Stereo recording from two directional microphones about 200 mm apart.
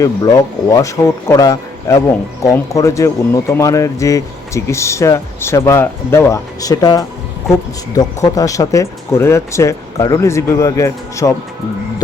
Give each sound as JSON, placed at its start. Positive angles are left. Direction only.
{"t": 0.0, "sound": "speech", "side_deg": 15}